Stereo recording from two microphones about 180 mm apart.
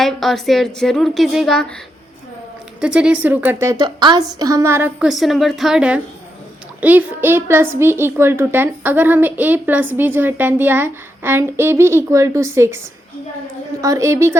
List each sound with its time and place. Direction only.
0.0 s speech: centre (ahead or behind)
2.8 s a woman's voice: 5° right (ahead or behind)
13.8 s a woman's voice: 15° right (ahead or behind)